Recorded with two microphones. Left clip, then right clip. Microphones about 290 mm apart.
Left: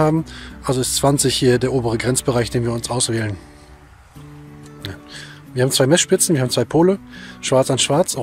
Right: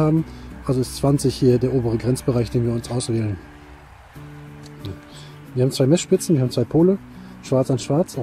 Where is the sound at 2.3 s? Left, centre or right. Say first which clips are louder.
Left 3 dB; left.